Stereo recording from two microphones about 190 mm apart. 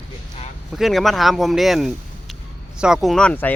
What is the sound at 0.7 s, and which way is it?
Speech, centre (ahead or behind).